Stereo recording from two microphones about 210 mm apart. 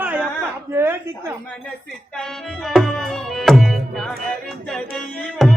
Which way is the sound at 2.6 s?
Centre (ahead or behind).